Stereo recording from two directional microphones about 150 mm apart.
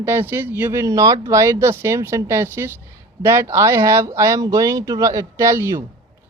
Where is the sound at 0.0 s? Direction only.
15° right (ahead or behind).